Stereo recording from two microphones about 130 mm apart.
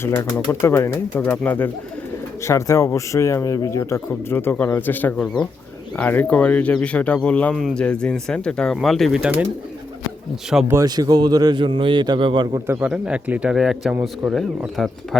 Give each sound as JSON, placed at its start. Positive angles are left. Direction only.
{"t": 0.0, "sound": "speech", "side_deg": 20}
{"t": 10.5, "sound": "speech", "side_deg": -10}
{"t": 10.8, "sound": "a man's voice", "side_deg": -30}
{"t": 12.6, "sound": "speech", "side_deg": -20}